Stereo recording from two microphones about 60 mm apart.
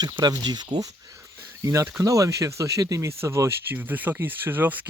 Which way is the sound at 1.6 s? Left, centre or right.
Right.